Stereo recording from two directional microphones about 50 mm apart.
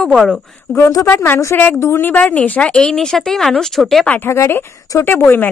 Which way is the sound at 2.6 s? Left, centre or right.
Centre.